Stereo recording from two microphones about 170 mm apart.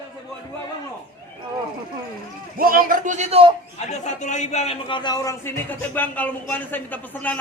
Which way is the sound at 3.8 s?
40° left (ahead or behind).